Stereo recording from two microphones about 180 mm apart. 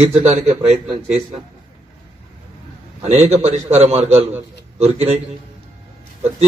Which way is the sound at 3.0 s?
35° right (ahead or behind).